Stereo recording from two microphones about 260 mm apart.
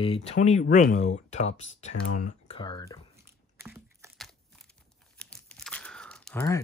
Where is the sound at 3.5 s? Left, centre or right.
Centre.